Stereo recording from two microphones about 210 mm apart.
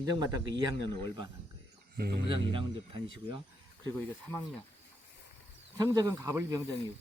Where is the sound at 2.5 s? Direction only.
25° right (ahead or behind).